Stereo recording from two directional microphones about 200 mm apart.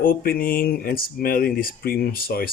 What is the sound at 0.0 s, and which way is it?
Speech, 45° left (ahead or behind).